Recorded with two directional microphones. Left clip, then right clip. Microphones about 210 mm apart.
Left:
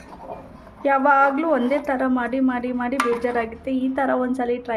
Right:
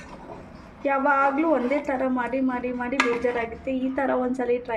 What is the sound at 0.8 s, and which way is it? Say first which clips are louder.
A woman's voice: left 5 dB; 25° left (ahead or behind).